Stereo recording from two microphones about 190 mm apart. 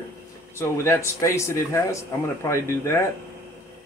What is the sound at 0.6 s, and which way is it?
Speech, 15° left (ahead or behind).